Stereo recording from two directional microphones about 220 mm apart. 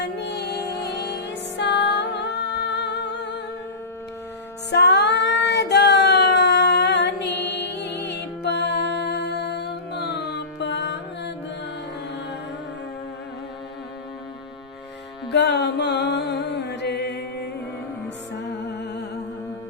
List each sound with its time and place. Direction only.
0.0 s music: 50° left (ahead or behind)
4.7 s child singing: 50° left (ahead or behind)
15.3 s music: 50° left (ahead or behind)